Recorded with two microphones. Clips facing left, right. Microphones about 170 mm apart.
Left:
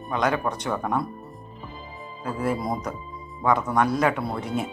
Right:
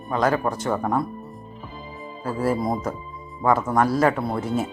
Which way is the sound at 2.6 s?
5° right (ahead or behind).